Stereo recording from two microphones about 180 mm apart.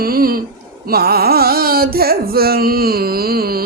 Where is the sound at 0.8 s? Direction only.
60° right (ahead or behind).